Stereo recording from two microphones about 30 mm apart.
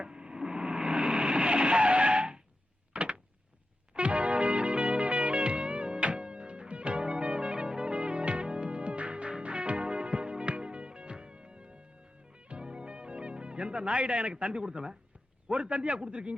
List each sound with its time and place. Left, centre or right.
0.0 s a sound: right
0.9 s vehicle: right
2.9 s door: right
3.9 s music: right
8.4 s music: right
13.7 s speech: right
15.6 s speech: right